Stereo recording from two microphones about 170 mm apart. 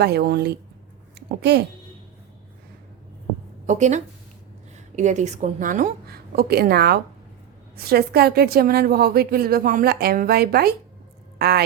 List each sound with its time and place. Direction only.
0.0 s a woman's voice: 70° right (ahead or behind)
1.1 s a sound: 75° right (ahead or behind)
3.7 s a woman's voice: 45° right (ahead or behind); by 11.6 s 70° right (ahead or behind)